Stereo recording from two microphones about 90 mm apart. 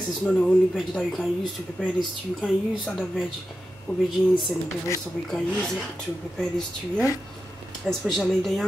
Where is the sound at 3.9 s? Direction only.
15° left (ahead or behind).